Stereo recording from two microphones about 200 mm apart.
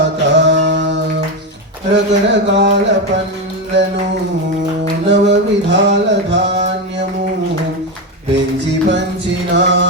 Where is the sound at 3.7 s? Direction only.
60° right (ahead or behind).